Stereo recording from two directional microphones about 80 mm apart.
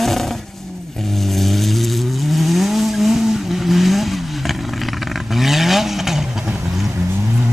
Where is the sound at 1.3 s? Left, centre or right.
Centre.